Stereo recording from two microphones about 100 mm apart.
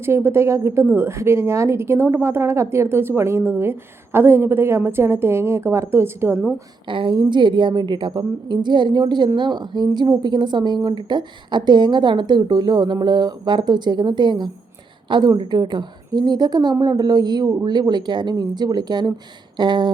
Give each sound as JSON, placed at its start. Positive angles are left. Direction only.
{"t": 0.0, "sound": "a woman's voice", "side_deg": -25}
{"t": 6.8, "sound": "a woman's voice", "side_deg": -55}